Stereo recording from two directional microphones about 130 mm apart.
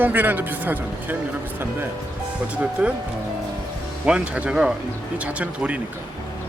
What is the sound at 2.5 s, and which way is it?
Speech, 10° right (ahead or behind).